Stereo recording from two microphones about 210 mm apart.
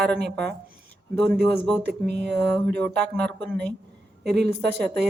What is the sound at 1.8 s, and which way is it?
Speech, 50° right (ahead or behind).